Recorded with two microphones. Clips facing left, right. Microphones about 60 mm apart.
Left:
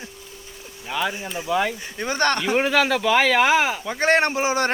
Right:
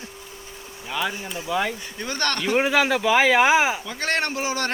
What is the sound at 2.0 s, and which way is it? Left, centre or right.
Speech, centre.